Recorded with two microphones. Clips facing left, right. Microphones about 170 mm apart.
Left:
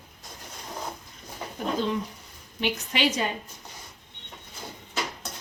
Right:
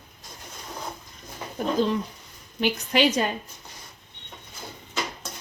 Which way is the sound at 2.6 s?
45° right (ahead or behind).